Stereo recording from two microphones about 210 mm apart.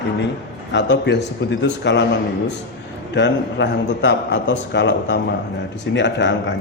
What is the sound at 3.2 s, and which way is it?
A man's voice, 55° left (ahead or behind).